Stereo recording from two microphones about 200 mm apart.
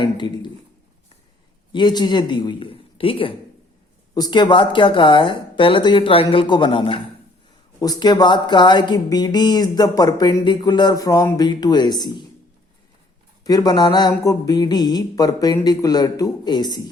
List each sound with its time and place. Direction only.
0.0 s a man's voice: 20° left (ahead or behind)
1.7 s speech: 20° left (ahead or behind)
13.4 s speech: 20° left (ahead or behind)